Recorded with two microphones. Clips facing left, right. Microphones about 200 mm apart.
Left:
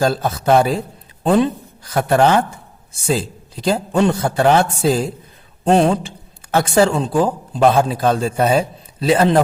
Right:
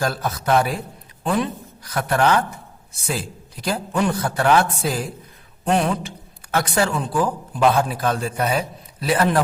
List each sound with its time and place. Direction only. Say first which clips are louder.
0.0 s a man's voice: left 6 dB; 25° left (ahead or behind)